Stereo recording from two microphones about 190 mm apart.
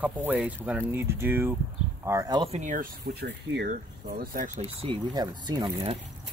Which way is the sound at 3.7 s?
50° right (ahead or behind).